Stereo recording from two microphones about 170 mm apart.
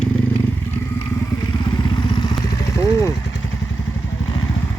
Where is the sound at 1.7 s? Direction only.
25° left (ahead or behind).